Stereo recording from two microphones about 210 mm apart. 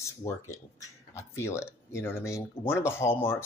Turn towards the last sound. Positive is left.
turn(degrees=10)  # may be behind; listen again after turning